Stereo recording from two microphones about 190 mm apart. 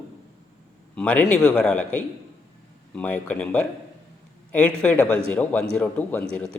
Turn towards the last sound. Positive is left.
turn(degrees=5)  # may be behind; listen again after turning